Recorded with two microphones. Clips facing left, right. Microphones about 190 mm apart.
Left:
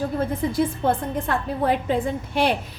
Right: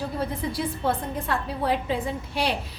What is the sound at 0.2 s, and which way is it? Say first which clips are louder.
A woman's voice: left 6 dB; 50° left (ahead or behind).